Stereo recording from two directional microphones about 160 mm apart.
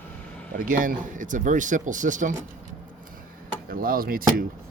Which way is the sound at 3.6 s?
65° right (ahead or behind).